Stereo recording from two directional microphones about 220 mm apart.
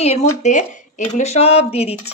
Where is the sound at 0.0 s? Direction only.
30° left (ahead or behind).